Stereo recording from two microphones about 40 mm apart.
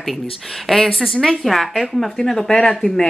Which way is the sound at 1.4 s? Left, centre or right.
Centre.